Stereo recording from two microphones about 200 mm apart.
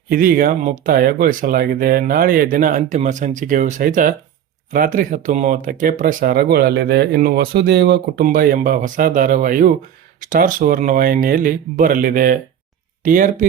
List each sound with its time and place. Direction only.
0.1 s speech: 45° right (ahead or behind)